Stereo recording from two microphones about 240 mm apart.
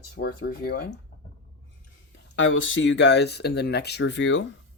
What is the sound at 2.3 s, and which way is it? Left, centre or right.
Speech, left.